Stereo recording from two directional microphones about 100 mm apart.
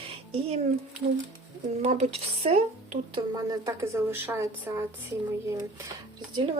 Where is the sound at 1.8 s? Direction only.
90° right.